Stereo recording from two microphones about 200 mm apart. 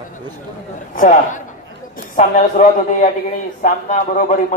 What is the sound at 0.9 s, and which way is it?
A man's voice, 40° left (ahead or behind).